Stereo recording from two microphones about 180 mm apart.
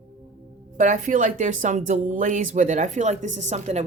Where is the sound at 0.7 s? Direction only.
45° right (ahead or behind).